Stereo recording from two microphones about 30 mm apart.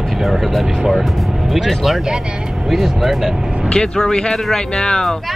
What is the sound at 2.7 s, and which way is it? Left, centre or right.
Speech, centre.